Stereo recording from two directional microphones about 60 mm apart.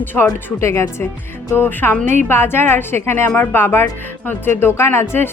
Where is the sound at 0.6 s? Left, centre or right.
Left.